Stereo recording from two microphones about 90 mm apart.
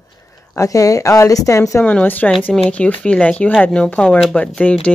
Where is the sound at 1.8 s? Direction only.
15° left (ahead or behind).